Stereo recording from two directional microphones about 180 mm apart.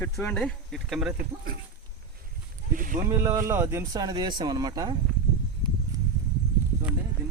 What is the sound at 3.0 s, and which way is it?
Speech, 15° right (ahead or behind).